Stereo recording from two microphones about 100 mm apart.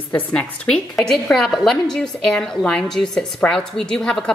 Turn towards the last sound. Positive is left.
turn(degrees=5)  # may be behind; listen again after turning